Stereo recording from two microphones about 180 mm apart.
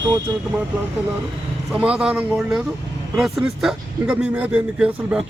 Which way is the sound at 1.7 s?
5° right (ahead or behind).